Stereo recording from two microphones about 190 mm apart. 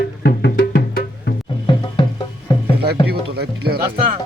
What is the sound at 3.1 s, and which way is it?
Music, 60° right (ahead or behind).